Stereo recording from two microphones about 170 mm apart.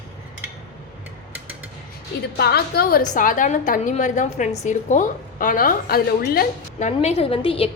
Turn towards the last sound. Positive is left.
turn(degrees=35)  # may be behind; listen again after turning